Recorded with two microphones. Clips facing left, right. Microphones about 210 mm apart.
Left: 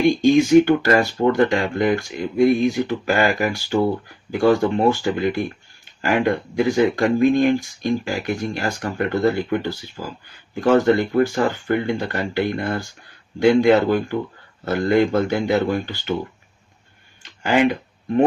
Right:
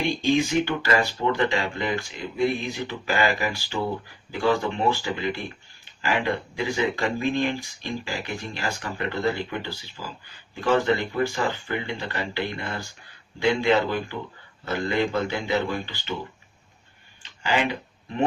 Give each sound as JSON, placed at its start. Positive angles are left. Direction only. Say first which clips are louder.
{"t": 0.1, "sound": "speech", "louder": "left 9 dB", "side_deg": 45}
{"t": 17.4, "sound": "speech", "louder": "left 8 dB", "side_deg": 50}